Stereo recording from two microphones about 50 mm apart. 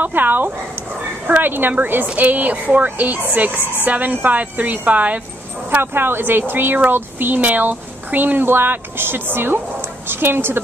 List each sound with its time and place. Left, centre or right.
0.0 s speech: right
5.8 s speech: right